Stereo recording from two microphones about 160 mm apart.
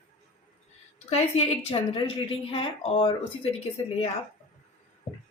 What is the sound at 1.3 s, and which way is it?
Speech, 45° left (ahead or behind).